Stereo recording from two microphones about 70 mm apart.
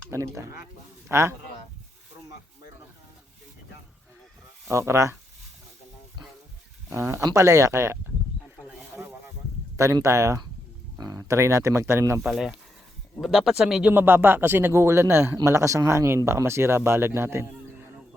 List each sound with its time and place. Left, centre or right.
0.1 s speech: right
4.7 s speech: right
6.9 s speech: right
7.3 s speech: right
9.7 s speech: right
12.2 s speech: centre
13.9 s speech: right
15.4 s speech: right